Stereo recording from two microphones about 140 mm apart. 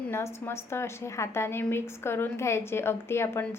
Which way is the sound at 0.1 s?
20° left (ahead or behind).